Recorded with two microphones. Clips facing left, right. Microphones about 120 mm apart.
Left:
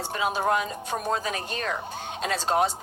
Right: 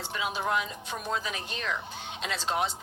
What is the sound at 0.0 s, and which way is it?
Speech, 40° left (ahead or behind).